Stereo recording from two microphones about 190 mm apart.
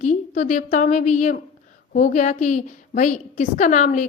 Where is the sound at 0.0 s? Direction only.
40° left (ahead or behind).